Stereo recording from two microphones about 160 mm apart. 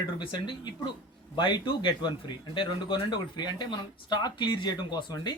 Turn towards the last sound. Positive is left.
turn(degrees=30)  # may be behind; listen again after turning